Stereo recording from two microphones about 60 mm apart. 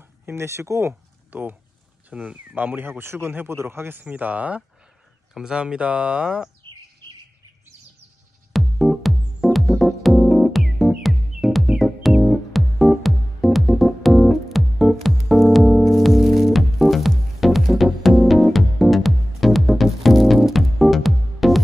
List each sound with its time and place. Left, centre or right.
0.2 s speech: right
1.3 s speech: right
2.0 s speech: right
2.5 s speech: right
4.0 s speech: right
5.3 s speech: centre
8.5 s music: centre